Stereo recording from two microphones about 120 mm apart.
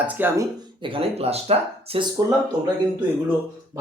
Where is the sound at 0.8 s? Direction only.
50° right (ahead or behind).